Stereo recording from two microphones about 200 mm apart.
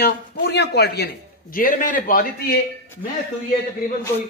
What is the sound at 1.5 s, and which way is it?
Speech, 45° left (ahead or behind).